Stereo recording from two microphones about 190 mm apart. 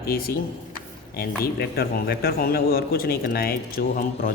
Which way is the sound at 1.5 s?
55° left (ahead or behind).